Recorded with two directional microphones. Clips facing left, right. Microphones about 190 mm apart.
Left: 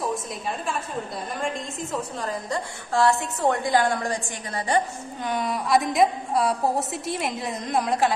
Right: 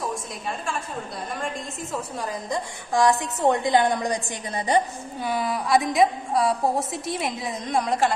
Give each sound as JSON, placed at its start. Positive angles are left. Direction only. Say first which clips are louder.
{"t": 0.0, "sound": "a sound", "louder": "left 2 dB", "side_deg": 0}
{"t": 1.4, "sound": "a woman's voice", "louder": "left 2 dB", "side_deg": 0}
{"t": 2.2, "sound": "a woman's voice", "louder": "even", "side_deg": -15}
{"t": 5.2, "sound": "a woman's voice", "louder": "right 1 dB", "side_deg": -5}